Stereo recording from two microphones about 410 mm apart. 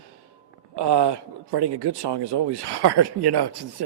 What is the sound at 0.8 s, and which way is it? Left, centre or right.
A man's voice, right.